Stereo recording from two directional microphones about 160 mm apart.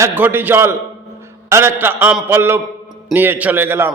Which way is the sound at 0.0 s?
15° right (ahead or behind).